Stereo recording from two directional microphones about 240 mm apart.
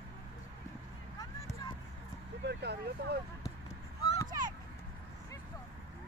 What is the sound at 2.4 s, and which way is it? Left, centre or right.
Vehicle, right.